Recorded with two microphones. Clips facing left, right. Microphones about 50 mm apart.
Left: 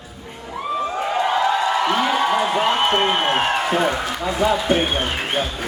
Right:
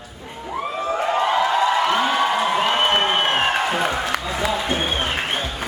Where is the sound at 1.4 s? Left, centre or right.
Centre.